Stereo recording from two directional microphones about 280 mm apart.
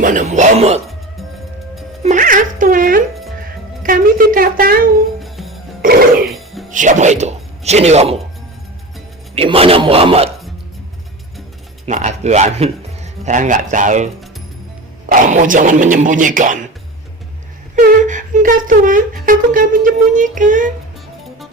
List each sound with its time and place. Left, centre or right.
0.0 s a sound: right
2.0 s music: right
3.8 s a sound: right
5.2 s music: centre
5.8 s music: right
6.2 s music: centre
6.7 s music: right
9.3 s a man's voice: right
11.9 s a man's voice: right
17.7 s speech: right